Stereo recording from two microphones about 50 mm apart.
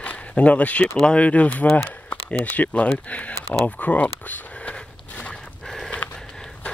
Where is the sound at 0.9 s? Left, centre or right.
Centre.